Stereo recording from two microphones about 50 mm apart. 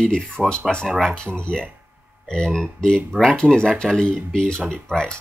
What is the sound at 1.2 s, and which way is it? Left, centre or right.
Speech, centre.